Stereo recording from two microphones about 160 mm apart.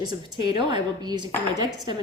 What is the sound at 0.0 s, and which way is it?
A woman's voice, 25° right (ahead or behind).